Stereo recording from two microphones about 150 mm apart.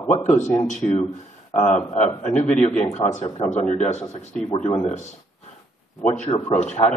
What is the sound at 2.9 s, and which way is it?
Speech, 50° left (ahead or behind).